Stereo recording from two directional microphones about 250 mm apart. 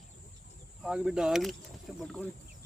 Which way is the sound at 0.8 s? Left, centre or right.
Centre.